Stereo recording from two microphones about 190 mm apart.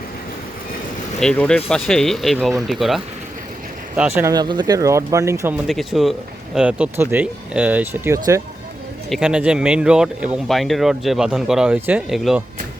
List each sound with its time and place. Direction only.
1.2 s speech: 5° left (ahead or behind); by 5.5 s 15° right (ahead or behind)
5.6 s speech: centre (ahead or behind); by 8.4 s 15° right (ahead or behind)
9.0 s speech: centre (ahead or behind)